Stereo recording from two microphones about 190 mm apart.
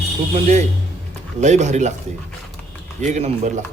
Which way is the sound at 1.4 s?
40° right (ahead or behind).